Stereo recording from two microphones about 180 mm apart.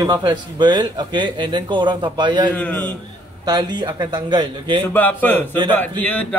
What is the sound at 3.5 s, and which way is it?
Speech, 25° right (ahead or behind).